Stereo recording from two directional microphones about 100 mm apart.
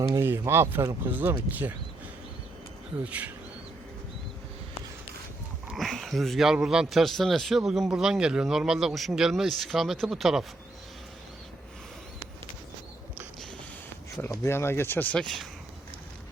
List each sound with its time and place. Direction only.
0.1 s speech: 25° right (ahead or behind)
3.0 s speech: 15° right (ahead or behind)
5.7 s speech: centre (ahead or behind)
14.3 s speech: 25° left (ahead or behind)